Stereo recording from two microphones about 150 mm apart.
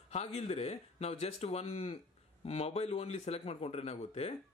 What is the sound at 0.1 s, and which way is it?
Speech, 45° left (ahead or behind).